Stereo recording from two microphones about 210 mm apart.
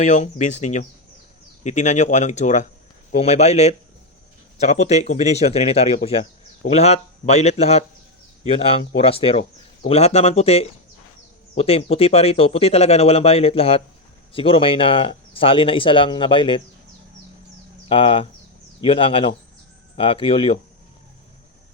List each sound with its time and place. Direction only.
0.0 s speech: 35° left (ahead or behind)
17.8 s speech: 25° left (ahead or behind)